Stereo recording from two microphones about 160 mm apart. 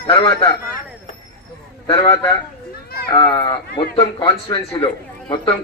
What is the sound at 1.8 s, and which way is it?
A man's voice, 30° left (ahead or behind).